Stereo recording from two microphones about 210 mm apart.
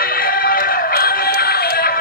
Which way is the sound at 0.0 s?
45° left (ahead or behind).